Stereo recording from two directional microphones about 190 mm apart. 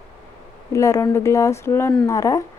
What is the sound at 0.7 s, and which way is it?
A woman's voice, 15° left (ahead or behind).